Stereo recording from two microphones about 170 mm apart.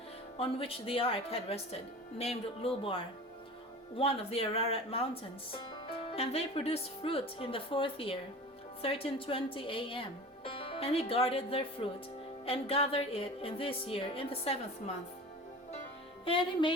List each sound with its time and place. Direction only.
0.3 s speech: 35° left (ahead or behind)
6.1 s speech: 35° left (ahead or behind)
16.2 s music: 30° left (ahead or behind)